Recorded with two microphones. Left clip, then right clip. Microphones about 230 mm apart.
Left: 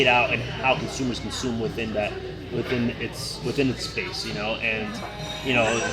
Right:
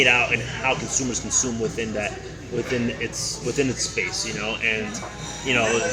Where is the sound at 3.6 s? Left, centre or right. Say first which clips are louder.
Right 2 dB; centre.